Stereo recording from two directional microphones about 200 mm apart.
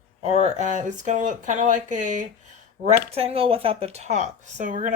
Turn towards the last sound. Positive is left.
turn(degrees=-40)  # may be behind; listen again after turning